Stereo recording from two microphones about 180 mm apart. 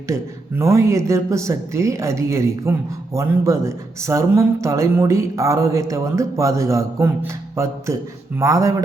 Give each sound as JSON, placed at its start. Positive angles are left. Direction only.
{"t": 0.1, "sound": "a woman's voice", "side_deg": -15}